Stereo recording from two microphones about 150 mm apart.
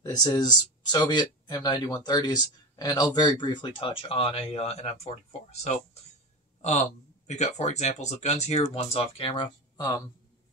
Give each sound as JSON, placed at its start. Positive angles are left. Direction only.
{"t": 0.0, "sound": "speech", "side_deg": 25}
{"t": 6.6, "sound": "speech", "side_deg": 50}